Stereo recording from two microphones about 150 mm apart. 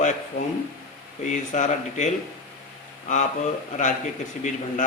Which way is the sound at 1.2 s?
55° left (ahead or behind).